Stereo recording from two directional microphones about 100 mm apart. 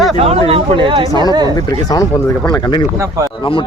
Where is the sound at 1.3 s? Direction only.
45° right (ahead or behind).